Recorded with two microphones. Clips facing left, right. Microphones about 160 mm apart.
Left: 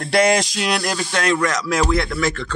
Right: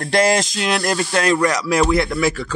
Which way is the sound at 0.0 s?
Centre (ahead or behind).